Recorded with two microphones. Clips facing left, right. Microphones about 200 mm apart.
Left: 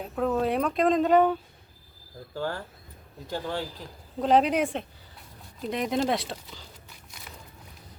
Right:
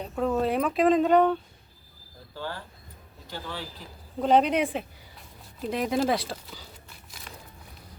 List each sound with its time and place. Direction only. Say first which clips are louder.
0.0 s speech: even; centre (ahead or behind)
2.3 s speech: left 4 dB; 50° left (ahead or behind)
4.2 s speech: even; centre (ahead or behind)